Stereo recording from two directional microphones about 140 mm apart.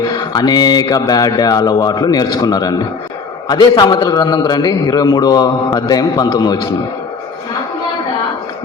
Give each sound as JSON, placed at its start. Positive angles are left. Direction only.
{"t": 0.1, "sound": "a man's voice", "side_deg": 30}